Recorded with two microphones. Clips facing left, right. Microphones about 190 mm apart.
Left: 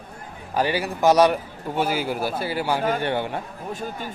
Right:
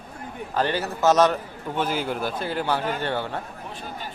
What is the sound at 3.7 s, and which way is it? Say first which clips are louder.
Speech: left 5 dB; 45° left (ahead or behind).